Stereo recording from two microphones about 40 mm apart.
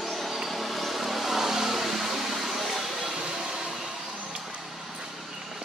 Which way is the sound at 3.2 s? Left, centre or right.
Centre.